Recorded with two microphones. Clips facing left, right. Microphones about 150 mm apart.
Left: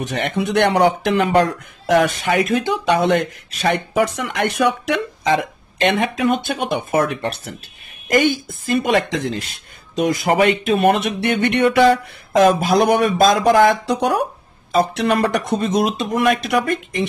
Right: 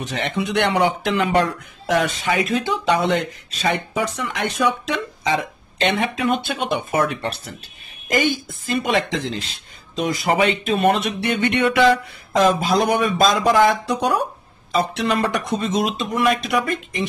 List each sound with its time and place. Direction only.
0.0 s speech: 55° left (ahead or behind)
6.5 s speech: 45° left (ahead or behind)